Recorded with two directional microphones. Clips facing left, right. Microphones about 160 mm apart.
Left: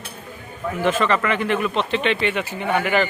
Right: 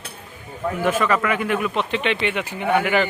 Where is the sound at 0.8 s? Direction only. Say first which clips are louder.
Left 1 dB; 10° right (ahead or behind).